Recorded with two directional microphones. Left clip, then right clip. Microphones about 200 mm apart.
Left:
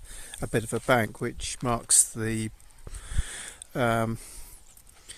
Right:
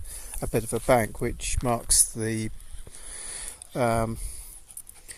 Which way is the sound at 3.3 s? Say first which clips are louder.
Right 1 dB; 10° left (ahead or behind).